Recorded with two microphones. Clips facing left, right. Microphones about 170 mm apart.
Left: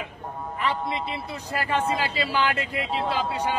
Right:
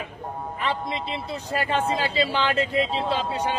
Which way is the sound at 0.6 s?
25° right (ahead or behind).